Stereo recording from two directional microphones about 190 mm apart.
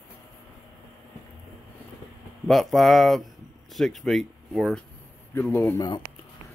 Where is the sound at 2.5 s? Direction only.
Centre (ahead or behind).